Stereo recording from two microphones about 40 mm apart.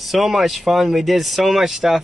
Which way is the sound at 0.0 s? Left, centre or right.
Centre.